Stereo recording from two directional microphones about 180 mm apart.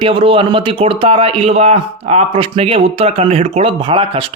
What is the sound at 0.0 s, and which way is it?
A man's voice, 30° right (ahead or behind).